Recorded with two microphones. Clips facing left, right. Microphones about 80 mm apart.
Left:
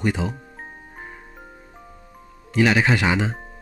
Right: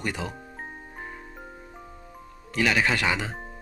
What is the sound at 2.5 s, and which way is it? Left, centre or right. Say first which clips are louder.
Speech: left 5 dB; left.